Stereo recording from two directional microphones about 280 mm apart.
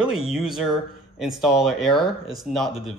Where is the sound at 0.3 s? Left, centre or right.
Centre.